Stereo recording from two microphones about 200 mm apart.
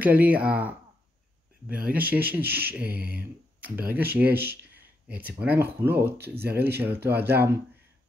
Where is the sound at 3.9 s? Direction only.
10° right (ahead or behind).